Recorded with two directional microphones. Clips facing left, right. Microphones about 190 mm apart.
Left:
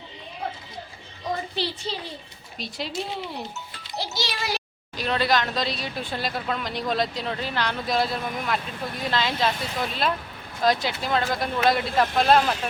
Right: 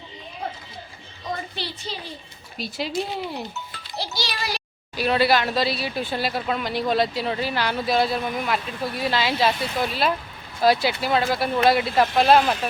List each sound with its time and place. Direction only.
1.5 s a woman's voice: 30° left (ahead or behind)
2.6 s speech: 5° right (ahead or behind)
3.9 s a child's voice: 20° left (ahead or behind)
4.9 s speech: 10° right (ahead or behind)